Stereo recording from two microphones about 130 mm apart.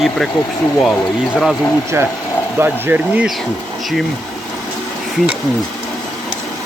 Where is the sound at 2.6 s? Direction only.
15° right (ahead or behind).